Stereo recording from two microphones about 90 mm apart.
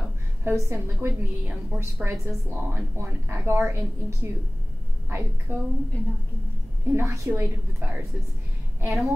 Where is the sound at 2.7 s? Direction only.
30° right (ahead or behind).